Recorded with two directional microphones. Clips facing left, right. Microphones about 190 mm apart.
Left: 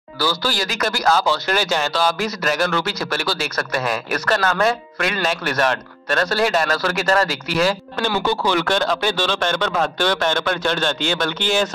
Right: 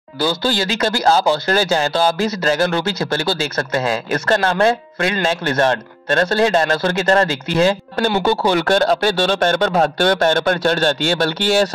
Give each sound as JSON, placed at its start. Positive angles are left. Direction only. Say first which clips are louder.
{"t": 0.2, "sound": "speech", "louder": "right 4 dB", "side_deg": -25}
{"t": 8.5, "sound": "speech", "louder": "right 5 dB", "side_deg": -45}